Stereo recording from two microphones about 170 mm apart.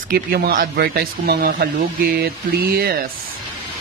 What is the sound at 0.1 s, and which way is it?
Speech, 65° right (ahead or behind).